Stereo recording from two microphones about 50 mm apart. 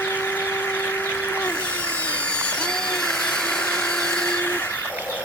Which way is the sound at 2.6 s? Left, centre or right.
Centre.